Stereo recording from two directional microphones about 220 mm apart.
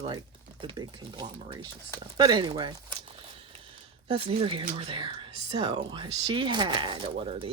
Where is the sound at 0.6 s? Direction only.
20° right (ahead or behind).